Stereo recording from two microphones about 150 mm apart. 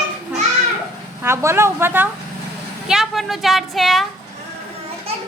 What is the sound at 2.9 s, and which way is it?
A woman's voice, centre (ahead or behind).